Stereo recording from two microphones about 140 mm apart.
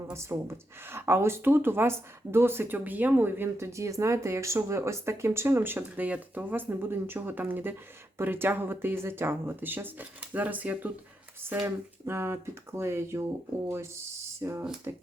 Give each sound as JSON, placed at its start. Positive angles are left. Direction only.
{"t": 0.1, "sound": "speech", "side_deg": -20}